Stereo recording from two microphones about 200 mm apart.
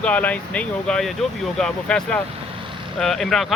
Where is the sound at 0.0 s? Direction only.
5° left (ahead or behind).